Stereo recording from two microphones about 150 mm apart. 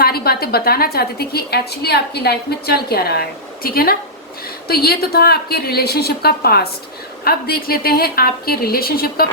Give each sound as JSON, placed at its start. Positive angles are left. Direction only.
{"t": 0.0, "sound": "a woman's voice", "side_deg": 90}